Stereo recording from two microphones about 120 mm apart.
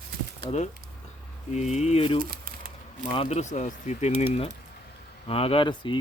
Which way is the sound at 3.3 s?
70° left (ahead or behind).